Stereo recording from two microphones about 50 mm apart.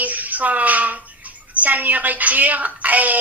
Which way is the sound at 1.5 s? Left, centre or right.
Right.